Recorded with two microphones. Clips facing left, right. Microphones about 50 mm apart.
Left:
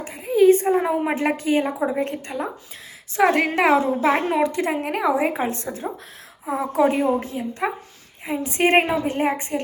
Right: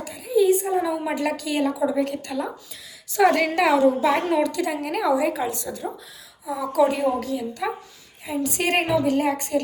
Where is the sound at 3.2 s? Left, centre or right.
Centre.